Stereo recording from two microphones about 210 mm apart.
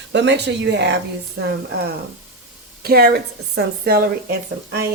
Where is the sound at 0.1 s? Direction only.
55° right (ahead or behind).